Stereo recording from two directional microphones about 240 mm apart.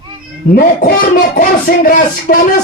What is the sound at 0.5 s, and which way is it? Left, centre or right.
A man's voice, left.